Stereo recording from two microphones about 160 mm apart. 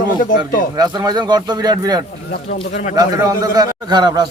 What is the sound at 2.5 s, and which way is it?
Speech, 45° left (ahead or behind).